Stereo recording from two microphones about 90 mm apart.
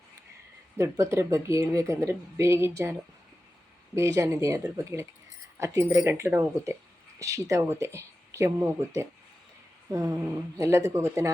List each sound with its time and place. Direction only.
0.8 s speech: 35° right (ahead or behind)
3.9 s speech: 35° right (ahead or behind)